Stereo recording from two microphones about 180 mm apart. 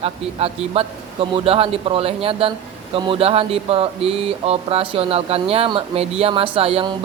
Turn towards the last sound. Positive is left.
turn(degrees=-30)  # may be behind; listen again after turning